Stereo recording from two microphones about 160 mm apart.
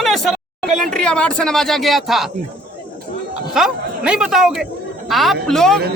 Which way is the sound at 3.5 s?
5° right (ahead or behind).